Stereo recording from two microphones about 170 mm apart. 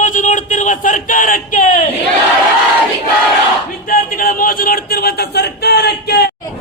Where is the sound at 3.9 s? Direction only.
55° left (ahead or behind); by 6.2 s 75° left (ahead or behind).